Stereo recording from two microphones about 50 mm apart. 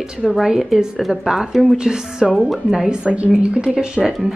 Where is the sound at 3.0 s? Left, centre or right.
Right; by 4.3 s centre.